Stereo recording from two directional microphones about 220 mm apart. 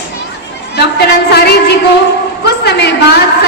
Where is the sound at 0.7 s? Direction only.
50° left (ahead or behind).